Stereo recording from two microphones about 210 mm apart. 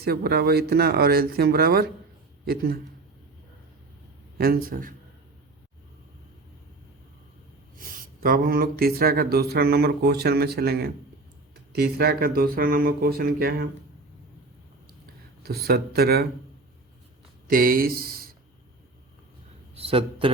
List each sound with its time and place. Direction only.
0.0 s a man's voice: 50° right (ahead or behind)
4.4 s speech: 45° right (ahead or behind)
7.8 s speech: 40° right (ahead or behind)
15.4 s speech: 50° right (ahead or behind)
17.5 s speech: 45° right (ahead or behind)
19.7 s a man's voice: 25° right (ahead or behind)